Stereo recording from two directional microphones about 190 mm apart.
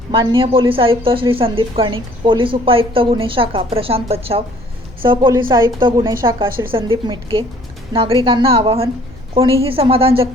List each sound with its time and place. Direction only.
0.1 s a woman's voice: 25° right (ahead or behind)